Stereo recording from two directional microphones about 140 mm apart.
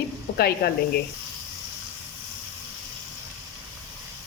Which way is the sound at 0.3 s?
90° left.